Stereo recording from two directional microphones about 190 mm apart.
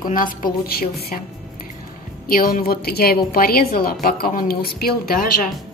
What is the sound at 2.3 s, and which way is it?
A woman's voice, 50° left (ahead or behind).